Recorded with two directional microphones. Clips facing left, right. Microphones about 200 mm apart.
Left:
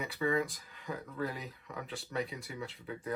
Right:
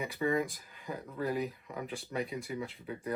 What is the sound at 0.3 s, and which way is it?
Speech, 15° right (ahead or behind).